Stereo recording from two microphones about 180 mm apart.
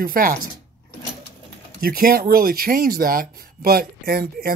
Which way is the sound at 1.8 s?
55° right (ahead or behind).